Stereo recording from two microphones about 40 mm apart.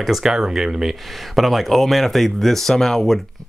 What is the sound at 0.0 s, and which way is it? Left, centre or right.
Speech, centre.